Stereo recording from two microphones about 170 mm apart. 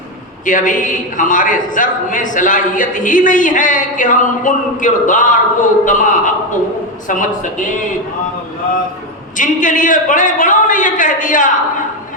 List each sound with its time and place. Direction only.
0.4 s a man's voice: 50° left (ahead or behind)
9.4 s a man's voice: 50° left (ahead or behind)